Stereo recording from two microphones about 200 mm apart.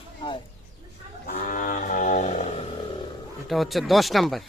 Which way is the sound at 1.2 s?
45° left (ahead or behind).